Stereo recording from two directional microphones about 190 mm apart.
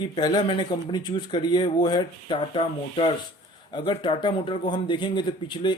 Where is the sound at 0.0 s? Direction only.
25° left (ahead or behind).